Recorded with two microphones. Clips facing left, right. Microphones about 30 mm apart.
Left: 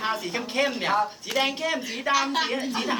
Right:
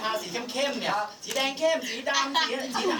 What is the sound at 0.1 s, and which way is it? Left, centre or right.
Speech, centre.